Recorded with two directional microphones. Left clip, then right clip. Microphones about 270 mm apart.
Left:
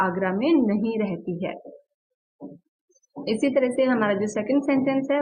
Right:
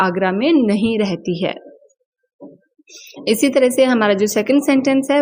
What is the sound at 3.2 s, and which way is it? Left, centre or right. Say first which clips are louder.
A woman's voice: right 8 dB; right.